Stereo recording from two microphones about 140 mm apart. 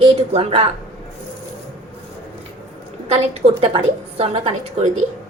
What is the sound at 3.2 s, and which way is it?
A woman's voice, 45° right (ahead or behind).